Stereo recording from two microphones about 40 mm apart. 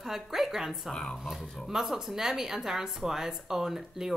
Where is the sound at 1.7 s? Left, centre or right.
Centre.